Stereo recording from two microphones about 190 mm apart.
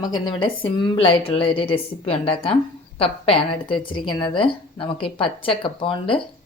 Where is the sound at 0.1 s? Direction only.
25° left (ahead or behind).